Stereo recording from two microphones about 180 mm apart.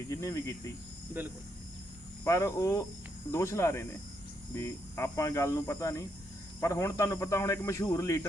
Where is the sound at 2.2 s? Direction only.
15° left (ahead or behind).